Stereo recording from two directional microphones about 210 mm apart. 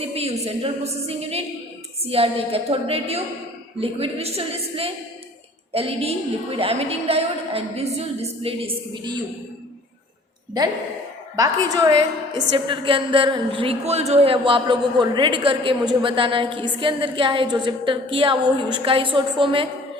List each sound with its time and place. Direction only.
0.0 s a woman's voice: 30° right (ahead or behind)
11.3 s a woman's voice: 15° right (ahead or behind)